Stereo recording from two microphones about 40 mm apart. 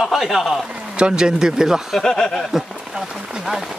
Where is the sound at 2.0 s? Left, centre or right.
Centre.